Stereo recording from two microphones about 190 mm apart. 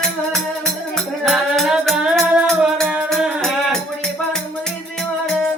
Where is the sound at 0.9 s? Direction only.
Centre (ahead or behind).